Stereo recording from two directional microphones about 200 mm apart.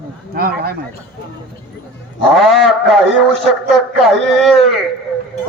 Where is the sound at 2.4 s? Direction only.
Centre (ahead or behind).